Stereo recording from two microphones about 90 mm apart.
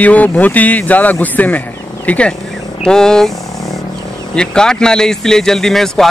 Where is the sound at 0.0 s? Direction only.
15° left (ahead or behind).